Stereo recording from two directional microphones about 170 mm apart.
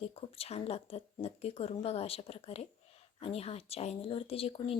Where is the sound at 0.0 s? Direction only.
35° left (ahead or behind).